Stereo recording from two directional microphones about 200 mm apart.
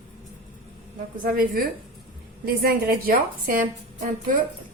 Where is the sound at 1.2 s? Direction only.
45° right (ahead or behind).